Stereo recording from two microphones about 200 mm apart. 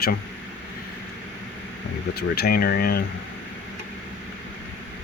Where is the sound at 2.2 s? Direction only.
50° left (ahead or behind).